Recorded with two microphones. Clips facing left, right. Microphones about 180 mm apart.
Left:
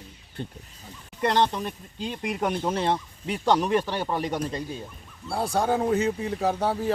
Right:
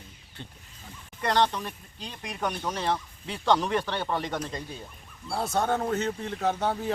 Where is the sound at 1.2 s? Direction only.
25° left (ahead or behind).